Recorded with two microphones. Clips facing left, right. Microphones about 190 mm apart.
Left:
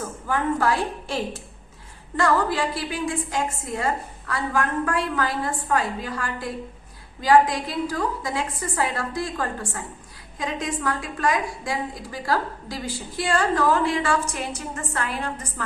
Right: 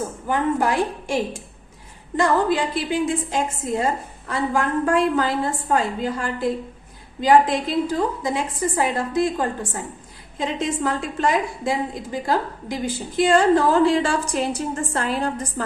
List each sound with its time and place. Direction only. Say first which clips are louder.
0.3 s a woman's voice: right 2 dB; 20° right (ahead or behind)